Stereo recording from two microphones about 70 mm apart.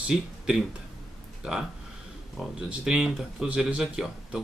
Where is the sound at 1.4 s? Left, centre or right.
Centre.